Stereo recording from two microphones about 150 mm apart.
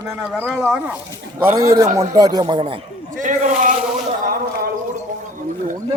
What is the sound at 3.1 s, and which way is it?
Speech, 60° right (ahead or behind).